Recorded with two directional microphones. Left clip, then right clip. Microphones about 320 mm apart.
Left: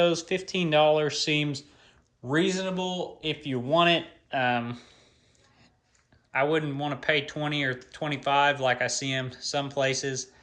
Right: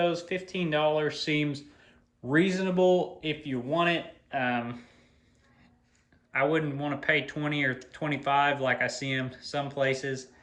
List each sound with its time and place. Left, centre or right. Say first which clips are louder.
0.0 s speech: left 4 dB; centre
6.3 s speech: left 1 dB; centre